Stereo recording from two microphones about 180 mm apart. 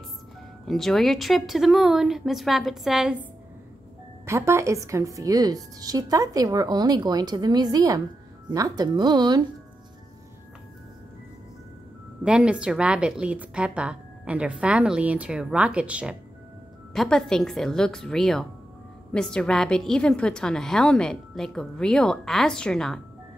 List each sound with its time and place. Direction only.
0.7 s a woman's voice: centre (ahead or behind)
4.3 s a woman's voice: 15° right (ahead or behind)
12.2 s a woman's voice: 5° right (ahead or behind)